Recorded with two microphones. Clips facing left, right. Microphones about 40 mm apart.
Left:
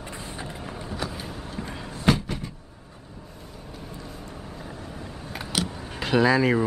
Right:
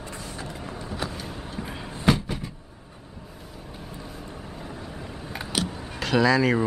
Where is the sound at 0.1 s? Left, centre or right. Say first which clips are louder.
Left 1 dB; left.